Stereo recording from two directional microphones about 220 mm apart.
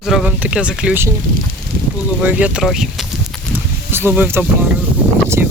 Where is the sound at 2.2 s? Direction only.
5° right (ahead or behind).